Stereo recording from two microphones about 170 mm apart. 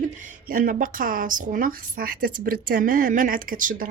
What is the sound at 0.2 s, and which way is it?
A woman's voice, 55° right (ahead or behind).